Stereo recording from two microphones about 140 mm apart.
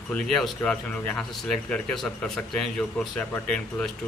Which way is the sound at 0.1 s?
5° left (ahead or behind).